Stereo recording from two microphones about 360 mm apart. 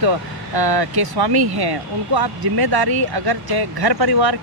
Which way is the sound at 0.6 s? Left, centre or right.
Right.